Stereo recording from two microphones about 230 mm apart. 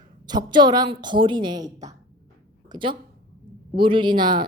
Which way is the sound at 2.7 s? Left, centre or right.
Right.